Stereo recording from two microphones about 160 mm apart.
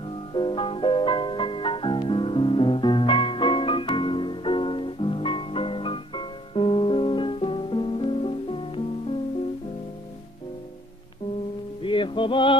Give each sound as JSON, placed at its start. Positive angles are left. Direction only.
{"t": 0.3, "sound": "music", "side_deg": 30}
{"t": 11.8, "sound": "music", "side_deg": 30}